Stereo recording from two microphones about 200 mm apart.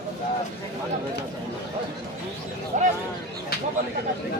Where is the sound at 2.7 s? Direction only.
40° right (ahead or behind).